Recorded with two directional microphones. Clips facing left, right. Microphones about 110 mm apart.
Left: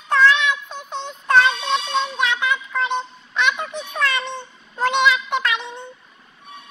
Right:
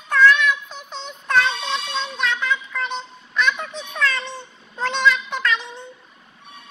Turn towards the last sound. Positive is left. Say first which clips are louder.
# even
turn(degrees=20)  # may be behind; listen again after turning